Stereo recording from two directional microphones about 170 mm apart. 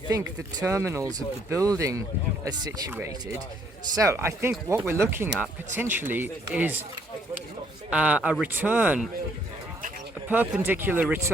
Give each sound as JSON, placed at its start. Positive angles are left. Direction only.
{"t": 0.3, "sound": "speech", "side_deg": -15}
{"t": 7.9, "sound": "speech", "side_deg": -5}
{"t": 10.2, "sound": "speech", "side_deg": -10}